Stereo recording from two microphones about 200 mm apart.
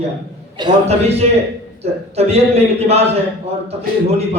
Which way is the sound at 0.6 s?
30° right (ahead or behind).